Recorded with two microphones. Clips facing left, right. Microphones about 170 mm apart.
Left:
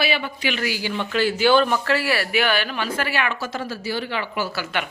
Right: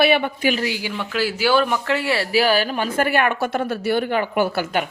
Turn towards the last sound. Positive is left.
turn(degrees=-45)  # may be behind; listen again after turning